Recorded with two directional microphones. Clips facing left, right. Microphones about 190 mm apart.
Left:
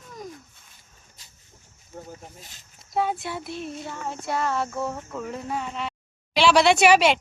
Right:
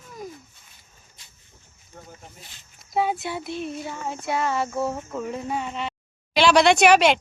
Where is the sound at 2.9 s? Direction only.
5° right (ahead or behind).